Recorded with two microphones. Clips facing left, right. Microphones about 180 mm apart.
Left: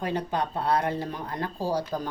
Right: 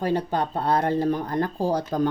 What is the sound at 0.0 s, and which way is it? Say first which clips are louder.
Speech: right 4 dB; 35° right (ahead or behind).